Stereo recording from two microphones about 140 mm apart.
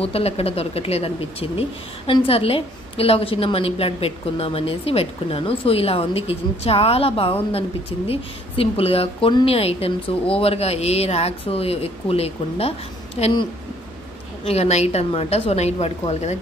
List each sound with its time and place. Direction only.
0.0 s speech: 45° left (ahead or behind)